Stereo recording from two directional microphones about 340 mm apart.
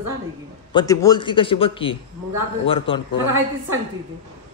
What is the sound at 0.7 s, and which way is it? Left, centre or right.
A man's voice, centre.